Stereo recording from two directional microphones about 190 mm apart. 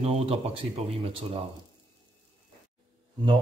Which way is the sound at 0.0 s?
35° right (ahead or behind).